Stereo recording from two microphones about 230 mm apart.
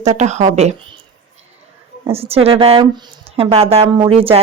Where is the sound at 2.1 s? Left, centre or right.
Right.